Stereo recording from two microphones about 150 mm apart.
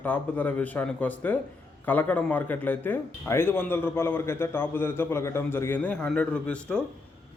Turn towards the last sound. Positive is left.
turn(degrees=10)  # may be behind; listen again after turning